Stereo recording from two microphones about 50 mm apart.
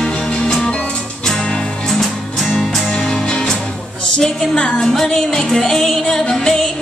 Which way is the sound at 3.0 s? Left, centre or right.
Centre.